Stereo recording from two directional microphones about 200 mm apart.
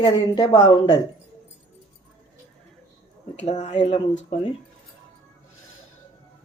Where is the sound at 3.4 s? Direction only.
35° left (ahead or behind).